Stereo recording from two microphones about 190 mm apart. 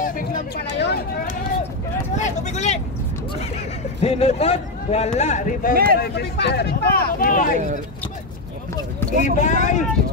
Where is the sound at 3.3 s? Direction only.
35° left (ahead or behind).